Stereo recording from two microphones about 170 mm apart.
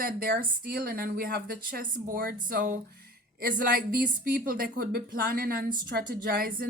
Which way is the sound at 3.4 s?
60° right (ahead or behind).